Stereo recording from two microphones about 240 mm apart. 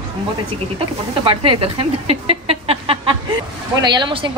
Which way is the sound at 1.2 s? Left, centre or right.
Right.